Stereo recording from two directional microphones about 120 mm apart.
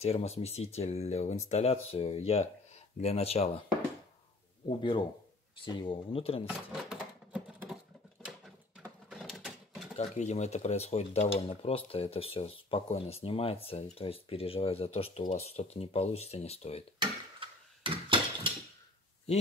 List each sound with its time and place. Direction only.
0.0 s speech: 60° left (ahead or behind)
4.6 s speech: 45° left (ahead or behind)
6.4 s a sound: 5° right (ahead or behind)
9.1 s mechanisms: centre (ahead or behind)
9.9 s speech: 70° left (ahead or behind)
17.8 s a sound: 45° right (ahead or behind)